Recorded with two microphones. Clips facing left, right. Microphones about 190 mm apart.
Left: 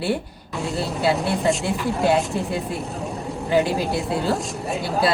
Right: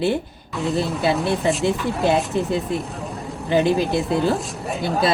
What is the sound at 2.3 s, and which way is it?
Speech, 20° right (ahead or behind).